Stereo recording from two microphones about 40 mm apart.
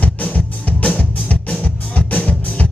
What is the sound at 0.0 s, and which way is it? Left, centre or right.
Music, left.